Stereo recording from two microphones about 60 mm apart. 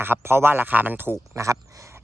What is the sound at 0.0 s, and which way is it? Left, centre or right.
Speech, right.